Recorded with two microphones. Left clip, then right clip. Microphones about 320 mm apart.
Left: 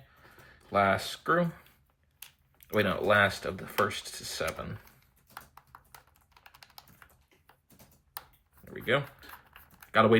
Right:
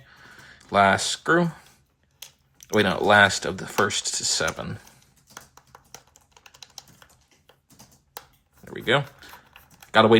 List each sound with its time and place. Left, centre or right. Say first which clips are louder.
0.7 s speech: right 8 dB; centre
2.6 s speech: right 7 dB; centre
8.6 s a sound: right 6 dB; centre
9.9 s speech: right 7 dB; centre